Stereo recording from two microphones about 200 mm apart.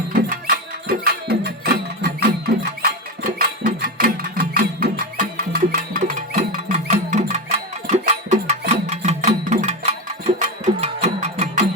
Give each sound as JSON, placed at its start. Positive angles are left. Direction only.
{"t": 0.1, "sound": "music", "side_deg": -45}